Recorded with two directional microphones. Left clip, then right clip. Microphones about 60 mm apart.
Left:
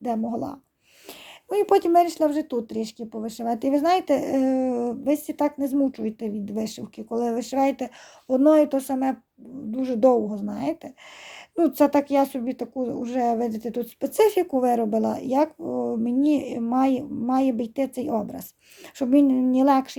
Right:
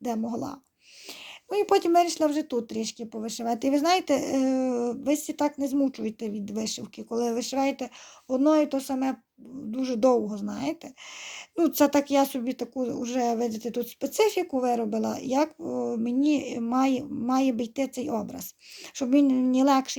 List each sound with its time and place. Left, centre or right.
0.3 s speech: left
1.5 s speech: left
1.7 s speech: left
7.6 s speech: left
8.4 s speech: left
9.7 s speech: left
11.6 s speech: left
14.2 s speech: left
15.1 s speech: left
19.4 s speech: left